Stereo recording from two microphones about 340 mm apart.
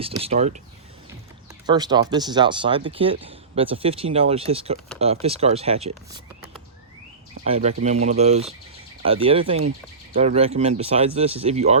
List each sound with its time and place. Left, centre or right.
0.0 s speech: centre
1.6 s speech: centre
7.4 s speech: centre